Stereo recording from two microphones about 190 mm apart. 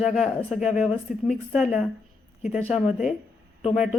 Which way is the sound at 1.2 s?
5° right (ahead or behind).